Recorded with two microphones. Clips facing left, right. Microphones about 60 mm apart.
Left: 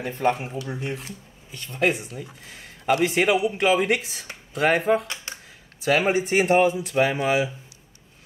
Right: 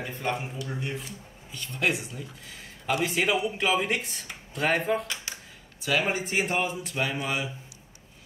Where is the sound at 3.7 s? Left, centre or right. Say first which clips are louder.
Left 5 dB; left.